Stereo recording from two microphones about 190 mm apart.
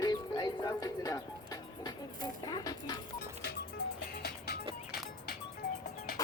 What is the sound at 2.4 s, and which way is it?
Music, 20° left (ahead or behind).